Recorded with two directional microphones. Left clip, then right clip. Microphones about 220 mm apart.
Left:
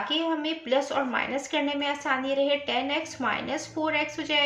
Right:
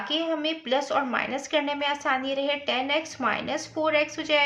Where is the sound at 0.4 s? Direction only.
40° right (ahead or behind).